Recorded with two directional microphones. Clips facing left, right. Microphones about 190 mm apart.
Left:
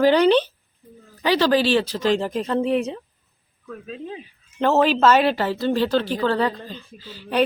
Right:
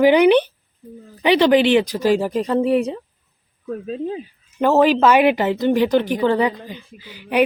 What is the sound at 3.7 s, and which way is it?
Speech, 40° right (ahead or behind).